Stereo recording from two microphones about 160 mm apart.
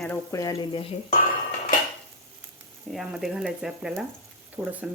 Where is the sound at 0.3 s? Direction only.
20° left (ahead or behind).